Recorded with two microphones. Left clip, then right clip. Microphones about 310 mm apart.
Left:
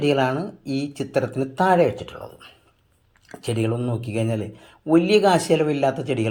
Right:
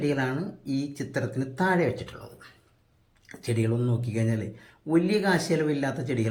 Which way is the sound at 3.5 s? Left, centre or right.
Left.